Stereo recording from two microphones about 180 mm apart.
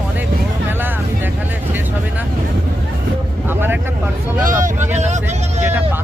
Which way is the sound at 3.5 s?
10° right (ahead or behind).